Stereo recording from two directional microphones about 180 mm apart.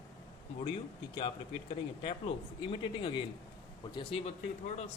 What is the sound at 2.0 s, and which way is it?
Speech, 30° left (ahead or behind).